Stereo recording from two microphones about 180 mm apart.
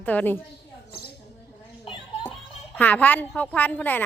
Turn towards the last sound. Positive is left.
turn(degrees=10)  # may be behind; listen again after turning